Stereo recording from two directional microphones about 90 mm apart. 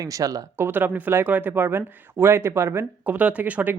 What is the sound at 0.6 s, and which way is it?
Speech, 20° right (ahead or behind).